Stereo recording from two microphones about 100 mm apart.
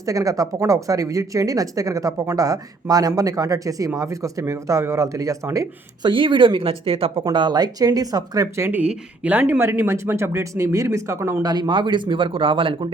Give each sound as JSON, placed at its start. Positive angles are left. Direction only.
{"t": 0.0, "sound": "speech", "side_deg": -35}
{"t": 6.0, "sound": "speech", "side_deg": -55}
{"t": 7.3, "sound": "speech", "side_deg": -45}
{"t": 8.7, "sound": "speech", "side_deg": -15}
{"t": 11.4, "sound": "speech", "side_deg": -45}